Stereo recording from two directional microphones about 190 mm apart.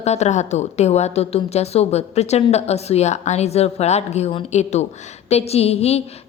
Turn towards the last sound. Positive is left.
turn(degrees=35)  # may be behind; listen again after turning